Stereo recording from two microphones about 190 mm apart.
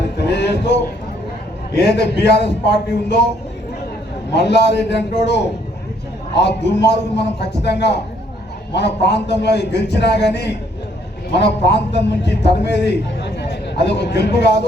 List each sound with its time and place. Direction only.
0.3 s a sound: 65° left (ahead or behind)
1.7 s a man's voice: 60° left (ahead or behind)
4.3 s a man's voice: 60° left (ahead or behind)